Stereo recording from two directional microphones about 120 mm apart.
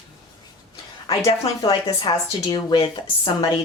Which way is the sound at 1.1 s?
55° left (ahead or behind).